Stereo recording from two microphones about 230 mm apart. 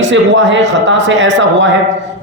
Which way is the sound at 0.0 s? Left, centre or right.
Right.